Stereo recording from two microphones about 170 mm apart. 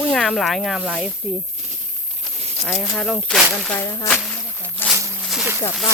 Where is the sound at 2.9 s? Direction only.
5° left (ahead or behind).